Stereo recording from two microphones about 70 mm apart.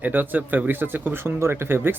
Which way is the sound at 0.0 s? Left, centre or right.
Right.